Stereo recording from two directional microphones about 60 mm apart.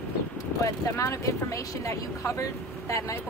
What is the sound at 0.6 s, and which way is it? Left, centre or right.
Speech, left.